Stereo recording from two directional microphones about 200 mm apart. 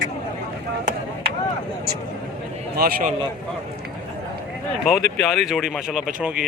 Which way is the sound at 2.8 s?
50° right (ahead or behind).